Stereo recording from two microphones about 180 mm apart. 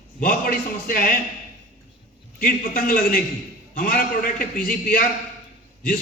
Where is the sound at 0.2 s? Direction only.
55° left (ahead or behind).